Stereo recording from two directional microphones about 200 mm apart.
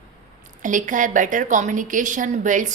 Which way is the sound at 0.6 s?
40° right (ahead or behind).